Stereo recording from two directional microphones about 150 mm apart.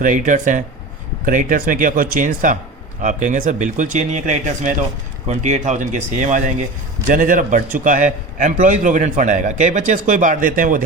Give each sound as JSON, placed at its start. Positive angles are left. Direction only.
{"t": 0.0, "sound": "a man's voice", "side_deg": -60}